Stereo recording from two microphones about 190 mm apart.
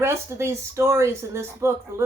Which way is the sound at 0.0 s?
15° right (ahead or behind).